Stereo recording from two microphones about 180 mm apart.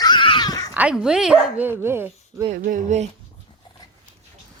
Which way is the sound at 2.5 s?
45° right (ahead or behind).